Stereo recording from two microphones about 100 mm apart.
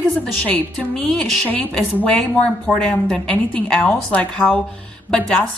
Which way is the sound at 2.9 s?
10° left (ahead or behind).